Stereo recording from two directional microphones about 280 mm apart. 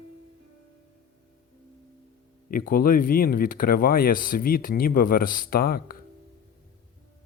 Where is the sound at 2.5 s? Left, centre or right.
Left.